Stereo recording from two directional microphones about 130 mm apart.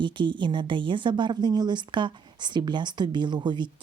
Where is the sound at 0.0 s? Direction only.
40° right (ahead or behind).